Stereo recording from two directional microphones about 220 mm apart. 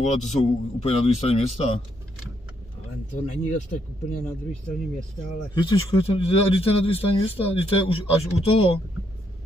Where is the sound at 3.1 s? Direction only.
35° left (ahead or behind).